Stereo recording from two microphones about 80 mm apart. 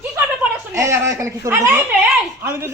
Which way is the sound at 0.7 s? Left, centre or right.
Right.